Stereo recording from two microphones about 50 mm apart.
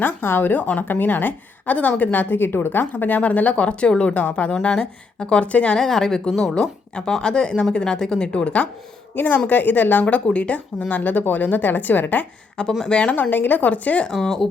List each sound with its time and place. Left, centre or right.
0.0 s speech: left
2.3 s speech: left
5.7 s a woman's voice: centre
8.3 s speech: left
9.1 s speech: left
10.0 s speech: left
12.8 s speech: left
13.3 s speech: left
14.1 s speech: centre